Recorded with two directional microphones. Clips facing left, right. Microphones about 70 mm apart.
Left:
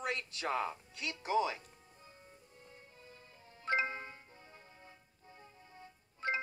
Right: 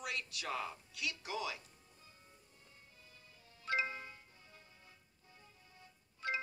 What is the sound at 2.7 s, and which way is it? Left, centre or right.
Music, left.